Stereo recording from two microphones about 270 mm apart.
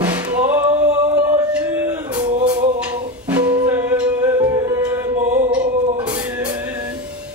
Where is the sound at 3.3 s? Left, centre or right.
Centre.